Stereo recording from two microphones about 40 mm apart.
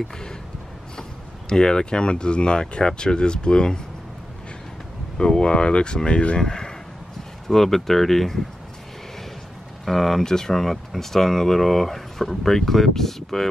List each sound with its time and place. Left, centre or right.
1.5 s speech: centre
5.1 s speech: centre
7.4 s speech: centre
9.8 s speech: centre